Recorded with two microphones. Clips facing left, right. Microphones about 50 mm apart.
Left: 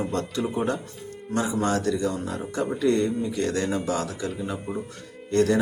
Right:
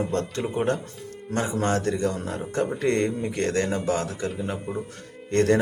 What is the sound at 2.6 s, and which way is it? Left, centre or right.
Speech, right.